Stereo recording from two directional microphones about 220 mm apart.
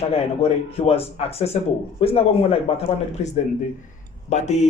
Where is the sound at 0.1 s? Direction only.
25° left (ahead or behind).